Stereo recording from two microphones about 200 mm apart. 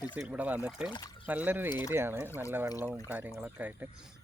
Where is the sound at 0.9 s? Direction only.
20° left (ahead or behind).